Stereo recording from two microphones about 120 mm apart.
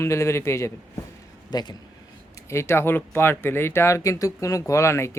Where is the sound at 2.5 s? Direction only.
20° left (ahead or behind).